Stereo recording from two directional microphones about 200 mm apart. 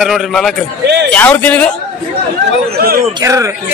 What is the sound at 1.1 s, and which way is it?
Speech, 5° left (ahead or behind).